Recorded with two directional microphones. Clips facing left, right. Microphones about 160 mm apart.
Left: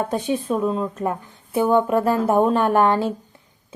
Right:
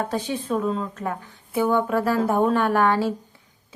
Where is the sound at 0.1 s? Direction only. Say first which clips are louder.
Left 3 dB; 15° left (ahead or behind).